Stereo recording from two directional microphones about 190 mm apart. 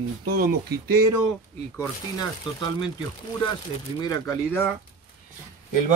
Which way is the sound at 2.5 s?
25° left (ahead or behind).